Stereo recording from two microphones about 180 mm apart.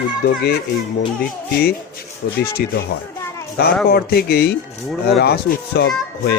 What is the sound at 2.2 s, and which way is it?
Speech, 70° left (ahead or behind).